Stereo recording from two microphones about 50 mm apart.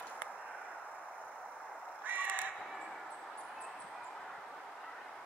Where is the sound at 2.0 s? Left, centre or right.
Right.